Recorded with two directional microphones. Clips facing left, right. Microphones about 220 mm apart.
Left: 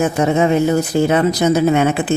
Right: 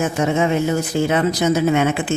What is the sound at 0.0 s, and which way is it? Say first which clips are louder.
Speech: left 4 dB; 35° left (ahead or behind).